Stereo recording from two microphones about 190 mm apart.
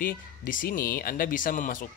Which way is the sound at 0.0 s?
45° left (ahead or behind).